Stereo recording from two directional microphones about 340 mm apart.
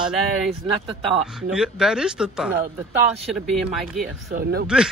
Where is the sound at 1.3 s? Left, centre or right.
Centre.